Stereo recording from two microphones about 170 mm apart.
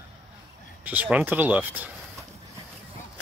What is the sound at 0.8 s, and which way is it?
Speech, 10° right (ahead or behind).